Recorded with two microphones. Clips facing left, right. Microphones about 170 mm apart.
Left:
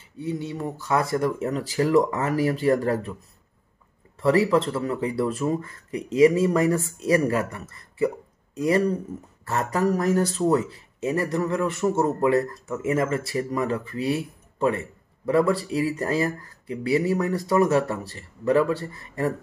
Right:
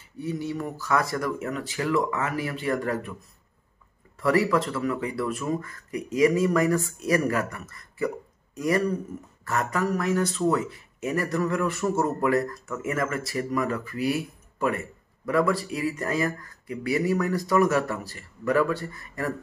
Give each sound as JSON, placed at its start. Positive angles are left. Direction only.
{"t": 0.2, "sound": "speech", "side_deg": 25}
{"t": 4.2, "sound": "a man's voice", "side_deg": 25}